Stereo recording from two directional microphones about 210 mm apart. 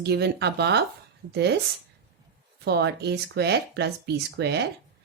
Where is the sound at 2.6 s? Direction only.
50° right (ahead or behind).